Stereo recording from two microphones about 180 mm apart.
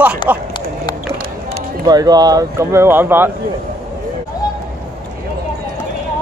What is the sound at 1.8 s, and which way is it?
Speech, 20° right (ahead or behind).